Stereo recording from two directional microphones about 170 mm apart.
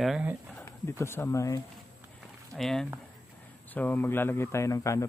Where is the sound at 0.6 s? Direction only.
15° left (ahead or behind).